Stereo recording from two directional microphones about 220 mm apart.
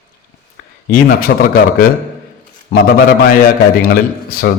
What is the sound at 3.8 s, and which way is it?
Speech, 40° left (ahead or behind).